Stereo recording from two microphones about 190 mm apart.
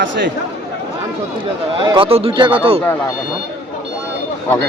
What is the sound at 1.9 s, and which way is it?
Speech, 30° right (ahead or behind).